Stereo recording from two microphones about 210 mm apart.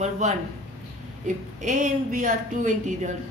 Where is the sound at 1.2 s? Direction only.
35° right (ahead or behind).